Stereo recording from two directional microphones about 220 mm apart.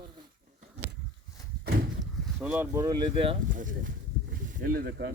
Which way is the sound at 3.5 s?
35° right (ahead or behind).